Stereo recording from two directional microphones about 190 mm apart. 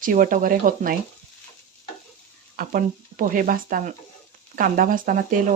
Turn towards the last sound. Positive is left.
turn(degrees=-45)  # may be behind; listen again after turning